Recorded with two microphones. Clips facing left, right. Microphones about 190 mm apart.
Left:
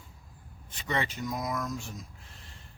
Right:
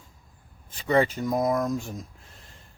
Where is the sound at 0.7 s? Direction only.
35° right (ahead or behind).